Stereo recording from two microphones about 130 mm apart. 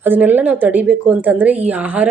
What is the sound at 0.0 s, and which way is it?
Speech, 15° right (ahead or behind).